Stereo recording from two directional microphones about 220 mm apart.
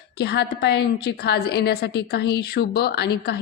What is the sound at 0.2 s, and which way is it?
A woman's voice, 50° left (ahead or behind).